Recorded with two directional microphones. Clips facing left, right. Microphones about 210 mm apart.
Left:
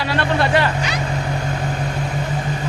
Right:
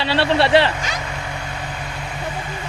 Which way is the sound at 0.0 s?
30° right (ahead or behind).